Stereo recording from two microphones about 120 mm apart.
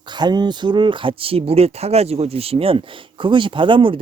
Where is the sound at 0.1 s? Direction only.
35° right (ahead or behind).